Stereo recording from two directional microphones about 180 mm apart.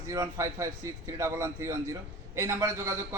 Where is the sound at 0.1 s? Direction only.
20° right (ahead or behind).